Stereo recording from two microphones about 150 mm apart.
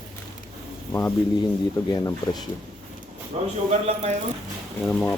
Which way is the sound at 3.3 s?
45° right (ahead or behind).